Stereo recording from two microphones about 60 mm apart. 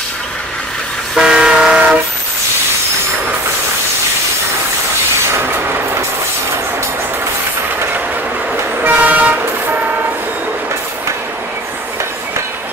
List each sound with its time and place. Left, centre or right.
1.1 s train: centre
8.8 s vehicle: right